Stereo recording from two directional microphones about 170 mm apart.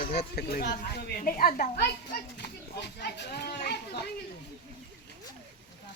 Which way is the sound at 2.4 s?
75° left (ahead or behind).